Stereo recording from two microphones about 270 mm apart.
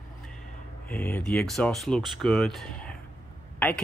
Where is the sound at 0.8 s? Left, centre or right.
Centre.